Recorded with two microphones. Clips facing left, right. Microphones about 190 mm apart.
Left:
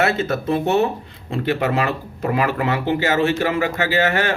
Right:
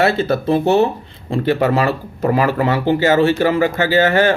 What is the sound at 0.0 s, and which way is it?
Speech, 30° right (ahead or behind).